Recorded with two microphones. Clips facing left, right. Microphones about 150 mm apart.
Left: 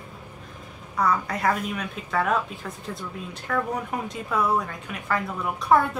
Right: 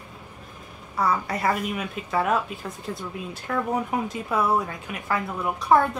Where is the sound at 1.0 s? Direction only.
5° right (ahead or behind).